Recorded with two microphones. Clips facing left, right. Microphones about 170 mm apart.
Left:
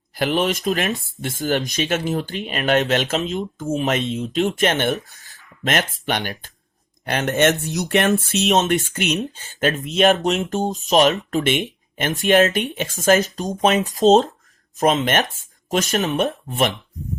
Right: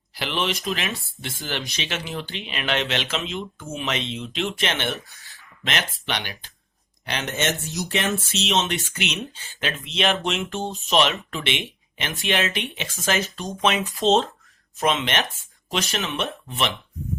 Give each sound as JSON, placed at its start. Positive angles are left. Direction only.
{"t": 0.1, "sound": "speech", "side_deg": 45}